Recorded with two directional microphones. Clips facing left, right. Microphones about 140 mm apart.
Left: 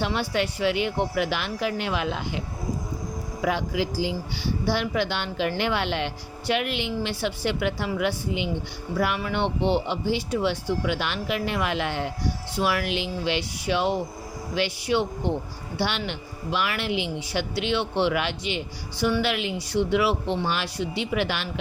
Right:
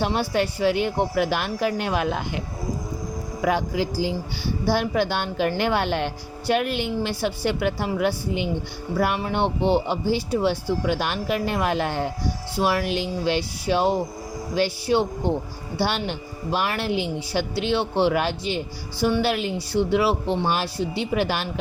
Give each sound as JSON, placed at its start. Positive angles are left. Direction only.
{"t": 0.0, "sound": "speech", "side_deg": -40}
{"t": 3.4, "sound": "speech", "side_deg": -45}